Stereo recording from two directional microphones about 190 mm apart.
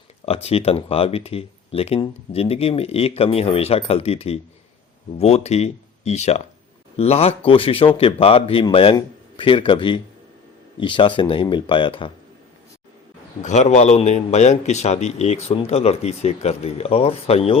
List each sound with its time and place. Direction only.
0.4 s a man's voice: 30° left (ahead or behind)
13.4 s a man's voice: 40° left (ahead or behind)